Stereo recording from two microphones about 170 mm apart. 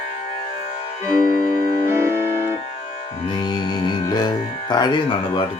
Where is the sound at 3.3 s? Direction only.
25° left (ahead or behind).